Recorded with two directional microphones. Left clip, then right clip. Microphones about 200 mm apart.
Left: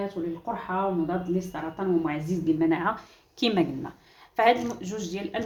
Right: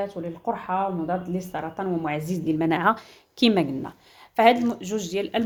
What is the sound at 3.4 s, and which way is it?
A woman's voice, 40° right (ahead or behind).